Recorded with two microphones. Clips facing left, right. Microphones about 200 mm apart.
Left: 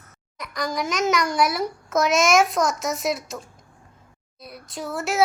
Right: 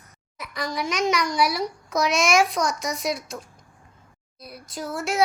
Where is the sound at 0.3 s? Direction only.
Centre (ahead or behind).